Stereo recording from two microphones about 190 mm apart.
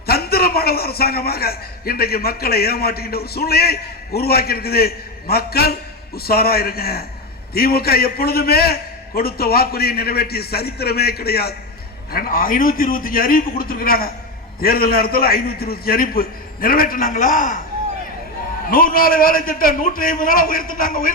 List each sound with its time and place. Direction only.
0.1 s a man's voice: 55° left (ahead or behind)
18.7 s a man's voice: 50° left (ahead or behind)